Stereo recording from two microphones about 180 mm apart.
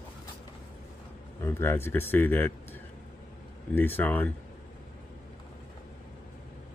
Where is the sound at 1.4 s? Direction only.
15° left (ahead or behind).